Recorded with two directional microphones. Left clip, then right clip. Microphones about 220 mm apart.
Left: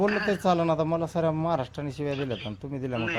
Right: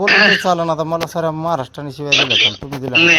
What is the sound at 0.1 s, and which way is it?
Speech, 55° right (ahead or behind).